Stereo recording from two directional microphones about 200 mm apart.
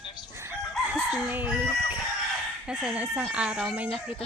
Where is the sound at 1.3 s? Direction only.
10° right (ahead or behind).